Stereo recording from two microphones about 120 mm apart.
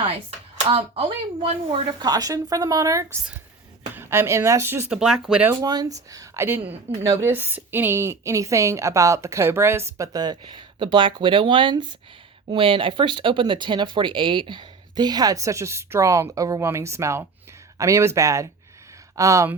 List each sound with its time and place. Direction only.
0.1 s a woman's voice: 50° right (ahead or behind); by 4.9 s 20° right (ahead or behind)
4.9 s speech: 5° right (ahead or behind)
5.6 s a woman's voice: 30° right (ahead or behind)
10.4 s a woman's voice: 40° right (ahead or behind); by 19.5 s 25° right (ahead or behind)